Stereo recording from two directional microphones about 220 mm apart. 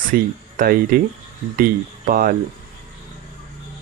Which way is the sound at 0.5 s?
40° right (ahead or behind).